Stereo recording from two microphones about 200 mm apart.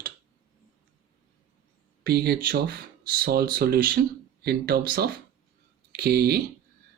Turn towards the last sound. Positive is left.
turn(degrees=-50)  # may be behind; listen again after turning